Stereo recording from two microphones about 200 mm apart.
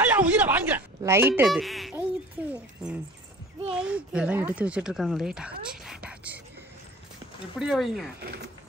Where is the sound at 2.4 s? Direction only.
5° right (ahead or behind).